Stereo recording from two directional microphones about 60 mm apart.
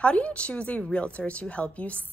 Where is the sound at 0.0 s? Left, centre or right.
Centre.